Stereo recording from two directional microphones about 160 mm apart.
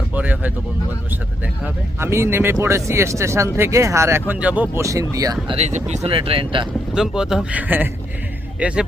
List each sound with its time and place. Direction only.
0.1 s a sound: 10° right (ahead or behind)
1.6 s speech: 15° right (ahead or behind)
5.5 s speech: 45° right (ahead or behind)
6.9 s speech: 5° right (ahead or behind)